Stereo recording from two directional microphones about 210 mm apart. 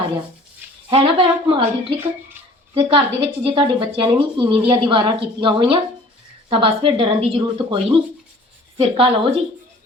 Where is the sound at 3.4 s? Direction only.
25° right (ahead or behind).